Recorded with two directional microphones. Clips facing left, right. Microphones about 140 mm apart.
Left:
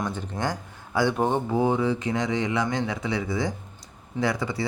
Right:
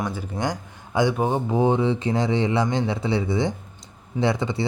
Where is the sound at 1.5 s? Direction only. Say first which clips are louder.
Right 3 dB; 25° right (ahead or behind).